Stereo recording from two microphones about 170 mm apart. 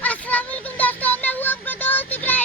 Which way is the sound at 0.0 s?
10° left (ahead or behind).